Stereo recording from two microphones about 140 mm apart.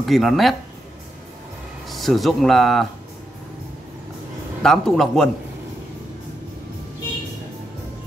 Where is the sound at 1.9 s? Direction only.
Centre (ahead or behind).